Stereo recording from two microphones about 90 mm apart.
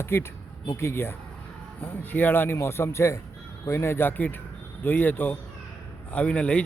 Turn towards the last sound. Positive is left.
turn(degrees=10)  # may be behind; listen again after turning